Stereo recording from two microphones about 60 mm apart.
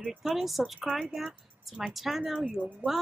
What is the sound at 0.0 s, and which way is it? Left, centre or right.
Speech, centre.